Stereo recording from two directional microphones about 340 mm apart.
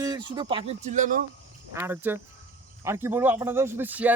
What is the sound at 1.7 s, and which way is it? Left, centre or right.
Speech, centre.